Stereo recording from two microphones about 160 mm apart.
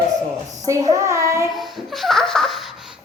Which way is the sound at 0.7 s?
20° right (ahead or behind).